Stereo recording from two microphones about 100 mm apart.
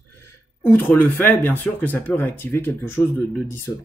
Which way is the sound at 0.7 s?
15° left (ahead or behind).